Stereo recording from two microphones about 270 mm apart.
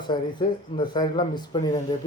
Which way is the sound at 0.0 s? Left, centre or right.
Centre.